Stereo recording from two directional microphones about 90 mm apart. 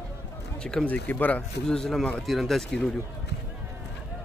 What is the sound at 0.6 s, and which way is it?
Speech, 10° left (ahead or behind).